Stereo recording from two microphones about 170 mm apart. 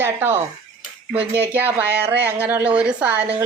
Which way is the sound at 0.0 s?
15° right (ahead or behind).